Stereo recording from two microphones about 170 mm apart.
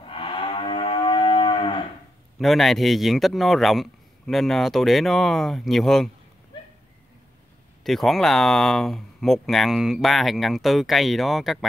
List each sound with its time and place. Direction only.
0.0 s moo: 30° left (ahead or behind)
2.3 s speech: centre (ahead or behind)
7.8 s speech: centre (ahead or behind)